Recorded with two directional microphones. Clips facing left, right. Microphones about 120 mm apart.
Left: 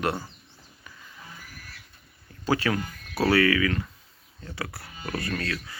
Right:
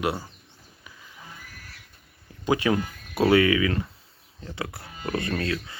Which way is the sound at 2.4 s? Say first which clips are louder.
Right 2 dB; 20° right (ahead or behind).